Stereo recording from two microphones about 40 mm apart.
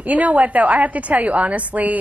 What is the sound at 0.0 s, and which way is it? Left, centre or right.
A woman's voice, right.